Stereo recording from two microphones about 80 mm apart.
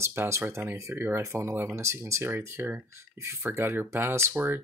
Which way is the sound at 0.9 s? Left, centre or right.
Right.